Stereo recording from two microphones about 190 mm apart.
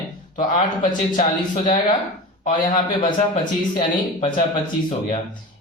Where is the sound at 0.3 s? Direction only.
45° left (ahead or behind).